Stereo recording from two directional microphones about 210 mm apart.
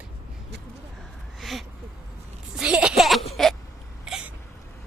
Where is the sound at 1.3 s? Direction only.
Centre (ahead or behind).